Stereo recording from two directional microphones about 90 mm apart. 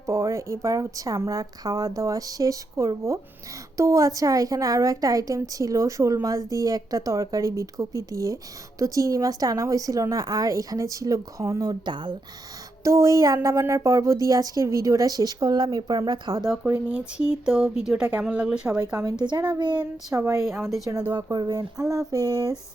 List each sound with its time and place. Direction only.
0.0 s a woman's voice: 35° right (ahead or behind); by 12.1 s 60° right (ahead or behind)
12.8 s a woman's voice: 35° right (ahead or behind)
16.9 s speech: 10° right (ahead or behind)
18.7 s speech: 45° right (ahead or behind)
19.2 s speech: 55° right (ahead or behind)
20.1 s a woman's voice: 30° right (ahead or behind)
21.0 s speech: 60° right (ahead or behind)
21.3 s speech: 50° right (ahead or behind)